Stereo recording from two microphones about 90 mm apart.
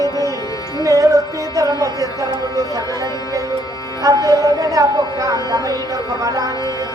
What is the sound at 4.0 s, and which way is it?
A woman's voice, 40° right (ahead or behind).